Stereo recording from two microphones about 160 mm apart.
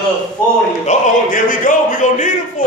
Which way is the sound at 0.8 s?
55° left (ahead or behind).